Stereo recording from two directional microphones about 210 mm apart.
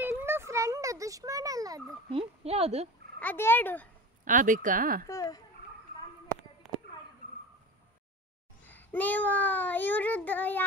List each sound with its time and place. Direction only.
0.0 s a sound: 10° right (ahead or behind); by 2.9 s 30° right (ahead or behind)
3.2 s a child's voice: 10° left (ahead or behind)
4.2 s speech: 40° right (ahead or behind)
5.0 s a child's voice: 15° left (ahead or behind)
8.6 s a child's voice: 10° left (ahead or behind)